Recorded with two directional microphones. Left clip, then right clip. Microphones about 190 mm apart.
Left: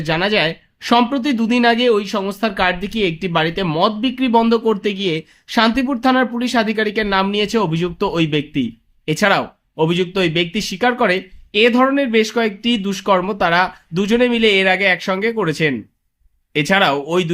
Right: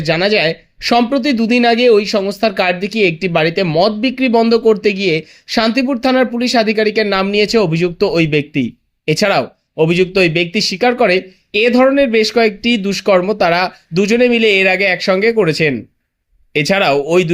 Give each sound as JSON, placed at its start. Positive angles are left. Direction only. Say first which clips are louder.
{"t": 0.0, "sound": "speech", "louder": "right 4 dB", "side_deg": -20}